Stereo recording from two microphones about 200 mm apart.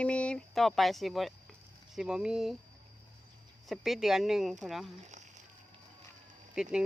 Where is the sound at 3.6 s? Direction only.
Centre (ahead or behind).